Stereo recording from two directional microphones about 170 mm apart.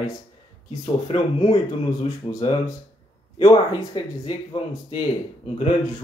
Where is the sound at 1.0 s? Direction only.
30° left (ahead or behind).